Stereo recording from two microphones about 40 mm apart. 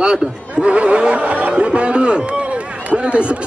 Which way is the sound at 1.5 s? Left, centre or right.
Right.